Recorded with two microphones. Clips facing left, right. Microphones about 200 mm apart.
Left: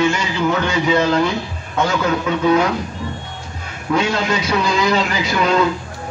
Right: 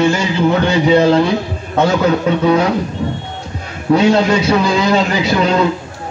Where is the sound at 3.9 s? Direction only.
35° right (ahead or behind).